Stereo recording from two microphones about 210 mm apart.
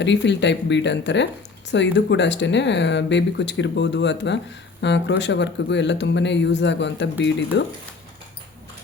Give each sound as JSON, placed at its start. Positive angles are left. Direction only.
{"t": 0.0, "sound": "speech", "side_deg": 55}